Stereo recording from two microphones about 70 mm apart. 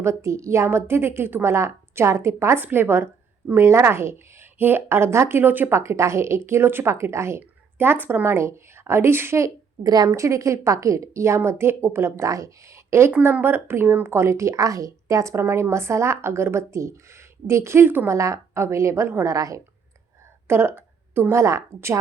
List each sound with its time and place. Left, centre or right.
0.0 s a woman's voice: right
5.7 s a woman's voice: right
9.8 s a woman's voice: right
10.1 s a woman's voice: right
13.4 s a woman's voice: right
15.4 s a woman's voice: right
18.1 s a woman's voice: right
19.3 s a woman's voice: right
20.5 s a sound: right
21.3 s a woman's voice: right